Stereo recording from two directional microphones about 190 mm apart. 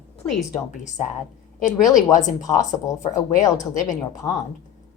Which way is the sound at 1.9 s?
20° left (ahead or behind).